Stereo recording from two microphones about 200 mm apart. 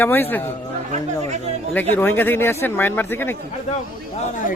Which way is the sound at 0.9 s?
35° right (ahead or behind).